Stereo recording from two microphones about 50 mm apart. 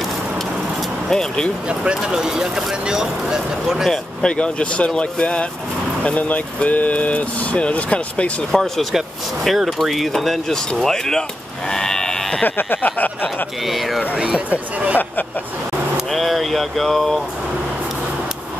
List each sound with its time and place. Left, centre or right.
1.1 s speech: centre
1.7 s speech: right
2.1 s speech: centre
3.8 s speech: centre
4.3 s speech: left
8.5 s speech: centre
12.4 s speech: left
13.7 s speech: centre
14.1 s speech: centre
14.5 s speech: right
16.1 s speech: centre